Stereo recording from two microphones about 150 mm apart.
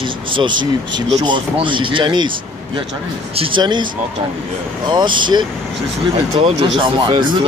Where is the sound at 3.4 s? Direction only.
35° right (ahead or behind).